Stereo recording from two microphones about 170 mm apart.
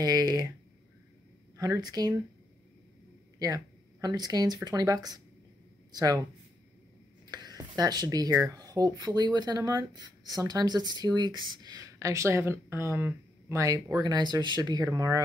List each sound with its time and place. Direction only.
0.0 s speech: 20° right (ahead or behind)
1.6 s speech: 20° right (ahead or behind)
3.3 s speech: 20° right (ahead or behind)
7.2 s speech: 25° right (ahead or behind)